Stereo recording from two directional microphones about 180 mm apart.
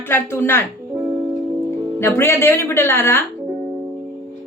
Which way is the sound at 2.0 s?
15° left (ahead or behind).